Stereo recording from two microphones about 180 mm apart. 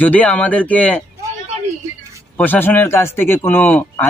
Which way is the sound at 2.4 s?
10° left (ahead or behind).